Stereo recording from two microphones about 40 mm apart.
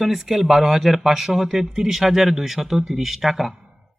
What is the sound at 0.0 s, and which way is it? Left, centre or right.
Speech, centre.